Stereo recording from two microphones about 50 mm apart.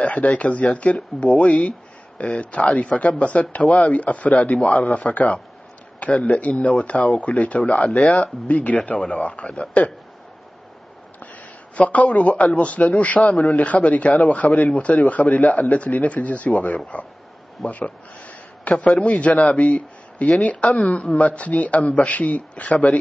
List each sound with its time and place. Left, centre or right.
0.0 s speech: left
7.9 s speech: centre
8.2 s speech: left
11.9 s a man's voice: left